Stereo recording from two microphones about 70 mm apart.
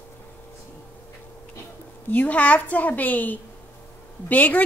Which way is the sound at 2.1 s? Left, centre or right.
Left.